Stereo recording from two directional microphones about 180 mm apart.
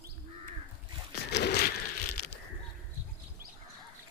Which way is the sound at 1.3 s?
70° left (ahead or behind).